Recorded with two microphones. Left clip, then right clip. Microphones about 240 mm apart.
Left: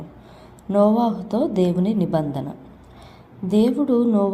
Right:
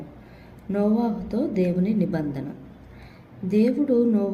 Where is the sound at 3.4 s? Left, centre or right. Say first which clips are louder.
Left 2 dB; left.